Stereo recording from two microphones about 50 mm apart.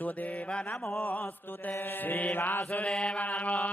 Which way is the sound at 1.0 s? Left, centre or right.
Left.